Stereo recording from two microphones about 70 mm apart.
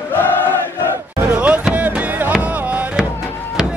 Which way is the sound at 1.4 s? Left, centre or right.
Right.